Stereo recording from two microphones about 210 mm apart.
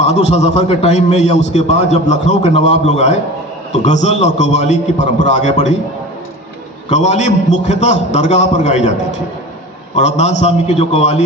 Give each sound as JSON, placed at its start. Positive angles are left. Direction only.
{"t": 0.0, "sound": "a man's voice", "side_deg": 30}
{"t": 6.8, "sound": "a man's voice", "side_deg": 30}